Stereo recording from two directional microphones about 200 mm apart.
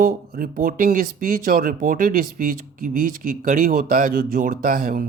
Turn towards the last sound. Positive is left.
turn(degrees=-45)  # may be behind; listen again after turning